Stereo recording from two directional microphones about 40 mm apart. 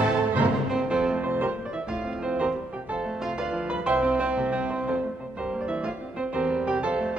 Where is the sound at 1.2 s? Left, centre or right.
Right.